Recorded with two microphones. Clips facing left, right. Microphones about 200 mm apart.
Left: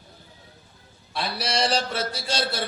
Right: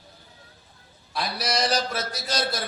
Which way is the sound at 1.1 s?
30° left (ahead or behind).